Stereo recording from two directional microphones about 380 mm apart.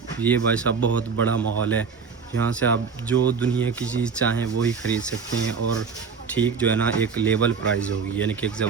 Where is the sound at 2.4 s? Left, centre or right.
Centre.